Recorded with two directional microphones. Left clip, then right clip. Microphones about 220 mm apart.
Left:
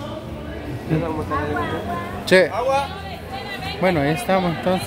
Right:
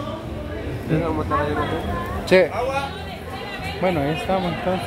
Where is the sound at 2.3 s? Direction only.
5° left (ahead or behind).